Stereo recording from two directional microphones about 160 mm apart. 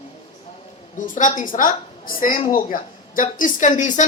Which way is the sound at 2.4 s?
45° left (ahead or behind).